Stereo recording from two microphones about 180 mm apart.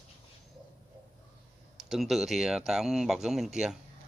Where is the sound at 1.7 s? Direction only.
Centre (ahead or behind).